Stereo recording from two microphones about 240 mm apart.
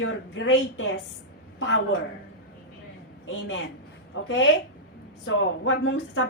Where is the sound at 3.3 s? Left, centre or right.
Left.